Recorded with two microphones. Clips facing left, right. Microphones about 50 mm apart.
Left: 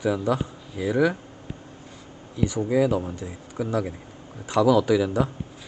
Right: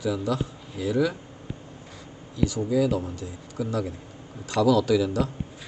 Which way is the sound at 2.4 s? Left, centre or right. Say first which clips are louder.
Left 1 dB; left.